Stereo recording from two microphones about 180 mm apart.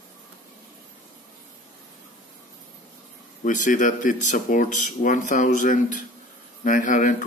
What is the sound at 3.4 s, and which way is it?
A man's voice, 45° left (ahead or behind).